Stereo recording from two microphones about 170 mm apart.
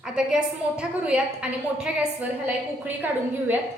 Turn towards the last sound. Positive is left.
turn(degrees=-10)  # may be behind; listen again after turning